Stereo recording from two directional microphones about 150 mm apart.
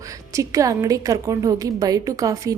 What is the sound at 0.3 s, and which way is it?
A woman's voice, 20° right (ahead or behind).